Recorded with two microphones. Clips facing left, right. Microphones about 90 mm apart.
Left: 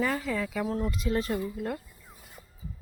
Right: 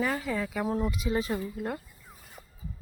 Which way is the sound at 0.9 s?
5° right (ahead or behind).